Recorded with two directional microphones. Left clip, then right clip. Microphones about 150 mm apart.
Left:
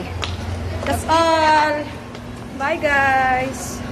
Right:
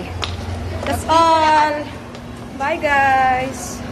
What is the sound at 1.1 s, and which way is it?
Speech, 15° left (ahead or behind).